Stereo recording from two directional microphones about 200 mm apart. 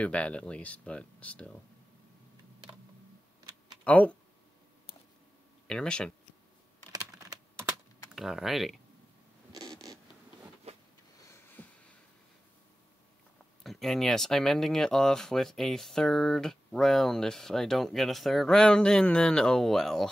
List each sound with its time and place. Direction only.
0.0 s speech: 5° left (ahead or behind)
3.8 s speech: 5° left (ahead or behind)
5.7 s speech: 5° left (ahead or behind)
6.9 s typing: 20° right (ahead or behind)
8.1 s speech: centre (ahead or behind)
9.5 s zipper: 20° right (ahead or behind)
11.6 s a sound: 10° left (ahead or behind)
13.7 s speech: centre (ahead or behind)